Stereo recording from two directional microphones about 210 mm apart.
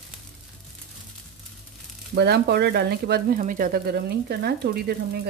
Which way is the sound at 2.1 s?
50° right (ahead or behind).